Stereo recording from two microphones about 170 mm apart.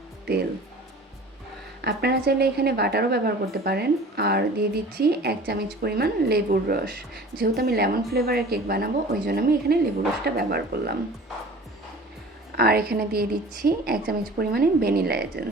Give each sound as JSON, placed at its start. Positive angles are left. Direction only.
{"t": 1.8, "sound": "speech", "side_deg": -70}
{"t": 12.5, "sound": "a woman's voice", "side_deg": -65}